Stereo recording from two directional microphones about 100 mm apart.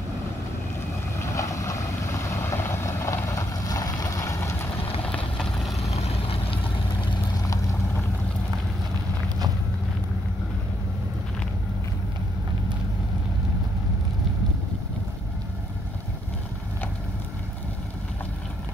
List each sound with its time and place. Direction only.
1.2 s boat: 30° left (ahead or behind)
5.0 s vehicle: 10° left (ahead or behind)
5.8 s vehicle: 90° left; by 6.6 s 70° left (ahead or behind)